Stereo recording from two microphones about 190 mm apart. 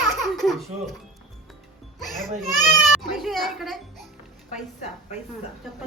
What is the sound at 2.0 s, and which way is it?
Music, centre (ahead or behind).